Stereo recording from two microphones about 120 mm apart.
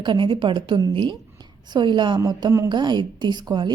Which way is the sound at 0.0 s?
40° right (ahead or behind).